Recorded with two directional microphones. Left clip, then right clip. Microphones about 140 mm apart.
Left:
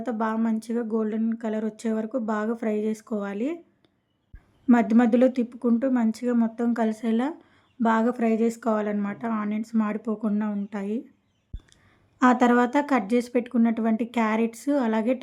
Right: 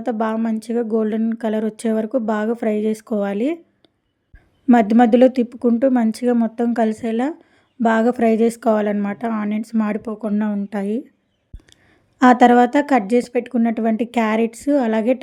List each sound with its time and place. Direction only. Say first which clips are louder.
0.0 s speech: right 6 dB; 25° right (ahead or behind)
4.6 s speech: right 7 dB; 30° right (ahead or behind)
12.2 s speech: right 8 dB; 30° right (ahead or behind)